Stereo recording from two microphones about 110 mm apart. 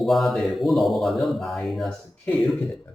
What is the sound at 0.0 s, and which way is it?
Speech, centre (ahead or behind).